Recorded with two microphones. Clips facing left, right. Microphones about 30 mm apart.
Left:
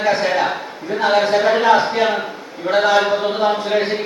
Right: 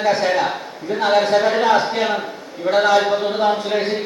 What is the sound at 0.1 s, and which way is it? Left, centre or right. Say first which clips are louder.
A man's voice: left 1 dB; centre.